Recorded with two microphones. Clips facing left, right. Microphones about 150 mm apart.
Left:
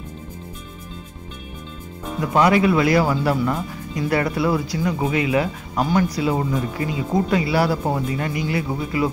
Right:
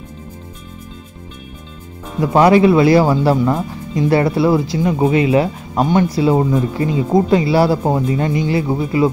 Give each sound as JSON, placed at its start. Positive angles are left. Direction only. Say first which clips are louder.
{"t": 2.3, "sound": "speech", "louder": "right 6 dB", "side_deg": -30}